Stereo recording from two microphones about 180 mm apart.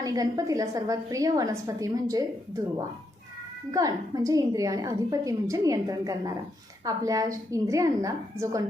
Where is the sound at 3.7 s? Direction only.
20° right (ahead or behind).